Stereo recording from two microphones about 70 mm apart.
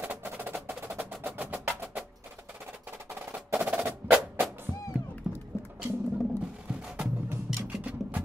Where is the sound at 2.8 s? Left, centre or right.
Right.